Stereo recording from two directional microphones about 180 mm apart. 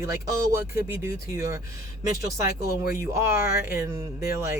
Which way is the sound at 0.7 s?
15° right (ahead or behind).